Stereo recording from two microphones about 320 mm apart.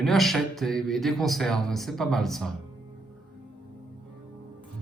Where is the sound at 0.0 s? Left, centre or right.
Centre.